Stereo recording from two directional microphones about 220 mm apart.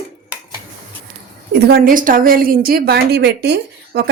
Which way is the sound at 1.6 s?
40° right (ahead or behind).